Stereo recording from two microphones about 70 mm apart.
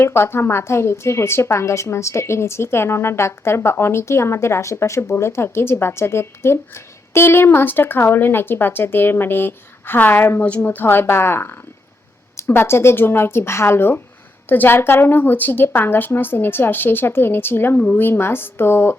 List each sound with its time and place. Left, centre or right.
0.0 s speech: left
10.4 s a woman's voice: centre
10.9 s speech: left